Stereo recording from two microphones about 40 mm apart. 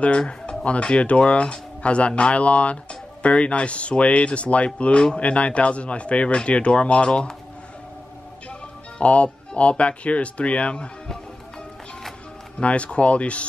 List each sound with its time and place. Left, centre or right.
0.7 s speech: left
8.5 s music: left
9.6 s speech: left
12.5 s speech: left